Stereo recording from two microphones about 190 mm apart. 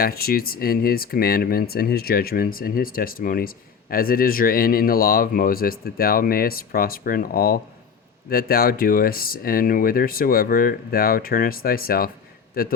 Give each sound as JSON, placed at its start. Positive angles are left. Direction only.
{"t": 0.0, "sound": "speech", "side_deg": 50}